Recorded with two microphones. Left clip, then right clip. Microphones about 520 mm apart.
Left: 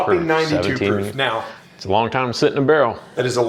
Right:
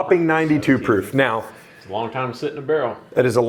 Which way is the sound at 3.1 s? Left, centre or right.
Right.